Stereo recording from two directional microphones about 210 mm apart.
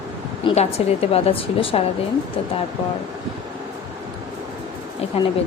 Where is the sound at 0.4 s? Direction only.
30° left (ahead or behind).